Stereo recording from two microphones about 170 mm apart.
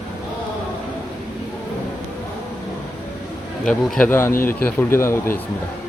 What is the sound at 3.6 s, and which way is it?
A man's voice, 5° left (ahead or behind).